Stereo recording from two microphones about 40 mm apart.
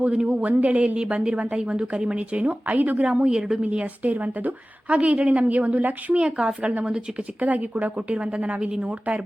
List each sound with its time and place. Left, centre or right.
0.0 s a woman's voice: right
6.1 s a woman's voice: right
7.4 s a woman's voice: right
7.9 s a woman's voice: right